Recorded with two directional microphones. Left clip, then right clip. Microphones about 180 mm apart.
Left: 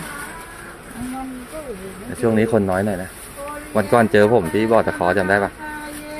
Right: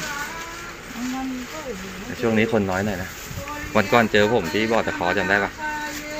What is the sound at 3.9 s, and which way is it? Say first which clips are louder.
Speech: left 5 dB; 35° left (ahead or behind).